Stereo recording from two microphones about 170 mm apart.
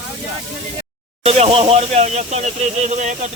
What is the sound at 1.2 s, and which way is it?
Speech, 35° right (ahead or behind).